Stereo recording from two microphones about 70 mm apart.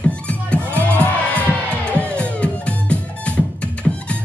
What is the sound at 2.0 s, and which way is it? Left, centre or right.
Music, centre.